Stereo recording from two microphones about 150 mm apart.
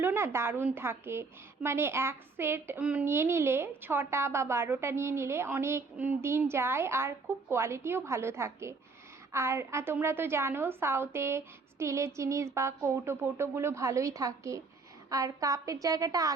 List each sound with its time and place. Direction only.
0.0 s a woman's voice: 15° right (ahead or behind)